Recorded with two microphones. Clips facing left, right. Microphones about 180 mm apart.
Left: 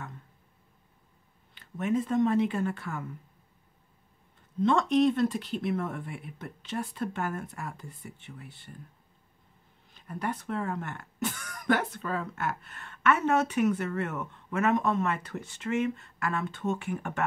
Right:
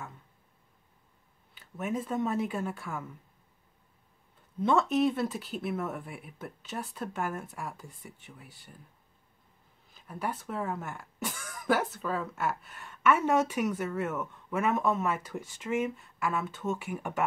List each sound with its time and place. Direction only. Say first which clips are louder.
1.5 s speech: left 5 dB; 5° right (ahead or behind)
4.6 s speech: left 2 dB; 5° right (ahead or behind)
9.9 s speech: left 2 dB; 5° right (ahead or behind)